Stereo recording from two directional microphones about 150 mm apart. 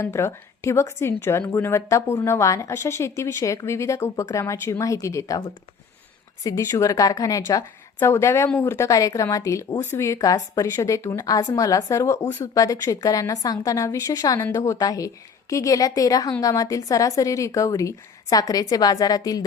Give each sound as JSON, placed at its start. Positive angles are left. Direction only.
{"t": 0.0, "sound": "a woman's voice", "side_deg": 20}
{"t": 6.4, "sound": "a woman's voice", "side_deg": 20}